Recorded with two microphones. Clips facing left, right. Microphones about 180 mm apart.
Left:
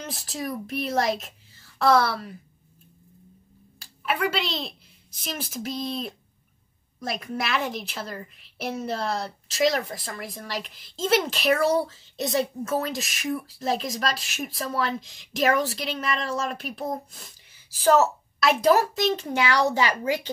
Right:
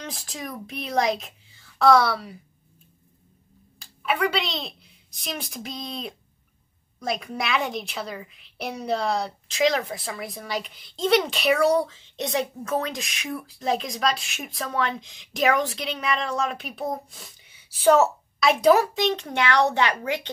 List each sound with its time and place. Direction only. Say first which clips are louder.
0.0 s speech: left 3 dB; 5° left (ahead or behind)
3.8 s a woman's voice: right 2 dB; centre (ahead or behind)